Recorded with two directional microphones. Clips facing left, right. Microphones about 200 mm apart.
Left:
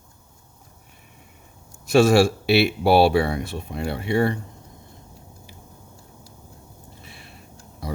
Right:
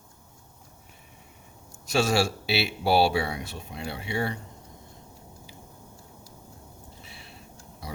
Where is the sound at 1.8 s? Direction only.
55° left (ahead or behind).